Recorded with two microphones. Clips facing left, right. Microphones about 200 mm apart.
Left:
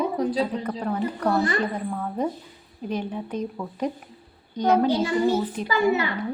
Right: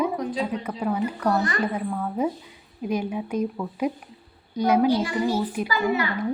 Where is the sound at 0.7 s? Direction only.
5° right (ahead or behind).